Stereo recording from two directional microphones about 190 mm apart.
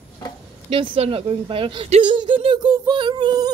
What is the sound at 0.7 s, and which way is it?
Speech, 30° right (ahead or behind).